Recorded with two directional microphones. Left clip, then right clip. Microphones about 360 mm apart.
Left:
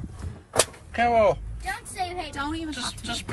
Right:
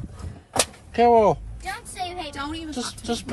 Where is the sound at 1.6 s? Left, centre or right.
Right.